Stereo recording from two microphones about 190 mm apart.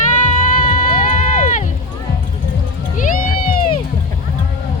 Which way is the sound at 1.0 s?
45° left (ahead or behind).